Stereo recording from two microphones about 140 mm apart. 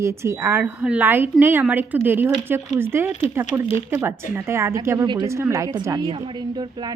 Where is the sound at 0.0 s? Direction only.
20° right (ahead or behind).